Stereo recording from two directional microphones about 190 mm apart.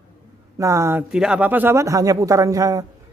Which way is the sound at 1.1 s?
5° right (ahead or behind).